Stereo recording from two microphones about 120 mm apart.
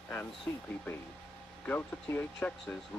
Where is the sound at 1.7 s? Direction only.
15° left (ahead or behind).